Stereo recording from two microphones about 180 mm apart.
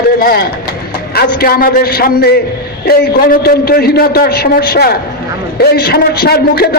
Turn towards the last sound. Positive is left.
turn(degrees=60)  # may be behind; listen again after turning